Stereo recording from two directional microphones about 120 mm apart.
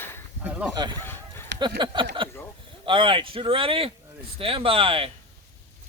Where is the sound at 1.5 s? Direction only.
40° right (ahead or behind).